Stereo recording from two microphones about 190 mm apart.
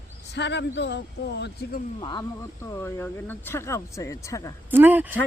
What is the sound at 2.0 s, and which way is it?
Speech, 25° left (ahead or behind).